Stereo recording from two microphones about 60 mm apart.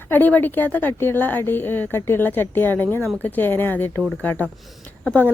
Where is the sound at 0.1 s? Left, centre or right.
Left.